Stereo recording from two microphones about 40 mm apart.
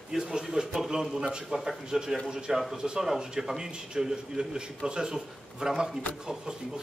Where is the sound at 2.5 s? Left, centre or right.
Centre.